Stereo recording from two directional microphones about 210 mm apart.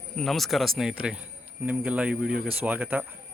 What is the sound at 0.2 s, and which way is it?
A man's voice, centre (ahead or behind).